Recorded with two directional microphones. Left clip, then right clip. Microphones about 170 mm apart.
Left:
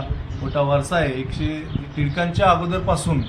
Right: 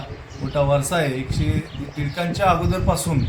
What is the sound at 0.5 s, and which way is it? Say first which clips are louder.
Speech: even; 35° right (ahead or behind).